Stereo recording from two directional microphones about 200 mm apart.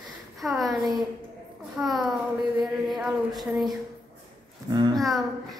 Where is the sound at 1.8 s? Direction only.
15° right (ahead or behind).